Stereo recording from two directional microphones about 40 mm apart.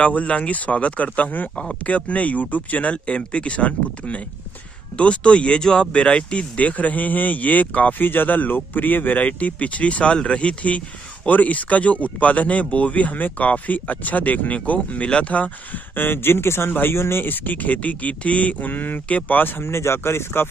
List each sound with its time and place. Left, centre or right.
0.0 s speech: left
6.5 s speech: left
8.0 s speech: left
15.0 s speech: left
15.3 s speech: left
17.3 s speech: left